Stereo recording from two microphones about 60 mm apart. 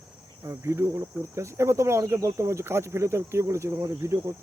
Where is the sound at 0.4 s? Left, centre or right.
Right.